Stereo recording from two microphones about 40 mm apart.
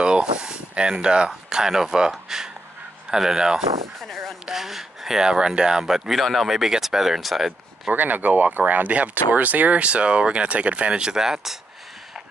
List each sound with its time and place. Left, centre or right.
0.0 s speech: right
4.0 s speech: centre
4.5 s speech: centre
7.9 s speech: right
11.0 s speech: centre